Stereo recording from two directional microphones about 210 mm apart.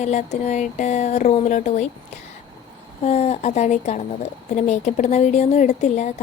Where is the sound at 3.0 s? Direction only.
30° left (ahead or behind).